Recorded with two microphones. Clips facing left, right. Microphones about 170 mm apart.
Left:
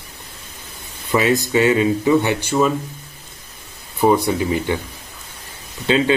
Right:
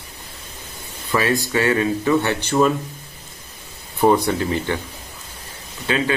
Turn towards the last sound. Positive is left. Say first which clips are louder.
# left 5 dB
turn(degrees=25)  # may be behind; listen again after turning